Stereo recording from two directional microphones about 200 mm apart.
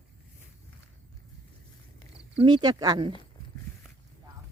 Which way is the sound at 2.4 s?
25° right (ahead or behind).